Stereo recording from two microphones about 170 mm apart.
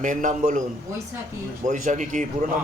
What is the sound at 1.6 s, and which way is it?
Speech, 45° right (ahead or behind).